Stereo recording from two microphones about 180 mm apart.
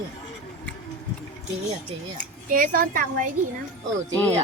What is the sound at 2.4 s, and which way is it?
Speech, 50° right (ahead or behind).